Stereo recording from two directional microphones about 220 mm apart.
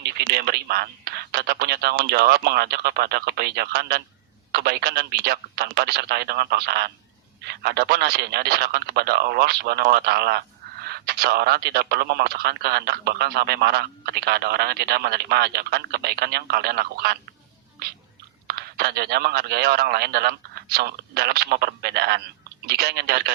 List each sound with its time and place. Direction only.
0.0 s speech: 45° right (ahead or behind)
17.8 s chewing: 45° right (ahead or behind)
18.4 s speech: 45° right (ahead or behind)